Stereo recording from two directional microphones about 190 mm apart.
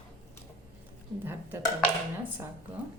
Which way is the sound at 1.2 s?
10° right (ahead or behind).